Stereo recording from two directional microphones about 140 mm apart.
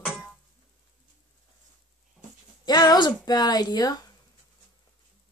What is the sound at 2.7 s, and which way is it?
Speech, 30° left (ahead or behind).